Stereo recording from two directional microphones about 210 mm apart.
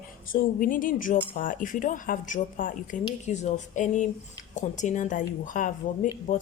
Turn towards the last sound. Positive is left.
turn(degrees=40)  # may be behind; listen again after turning